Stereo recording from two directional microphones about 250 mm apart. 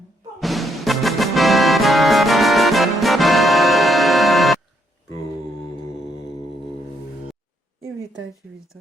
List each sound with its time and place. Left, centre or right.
0.3 s music: centre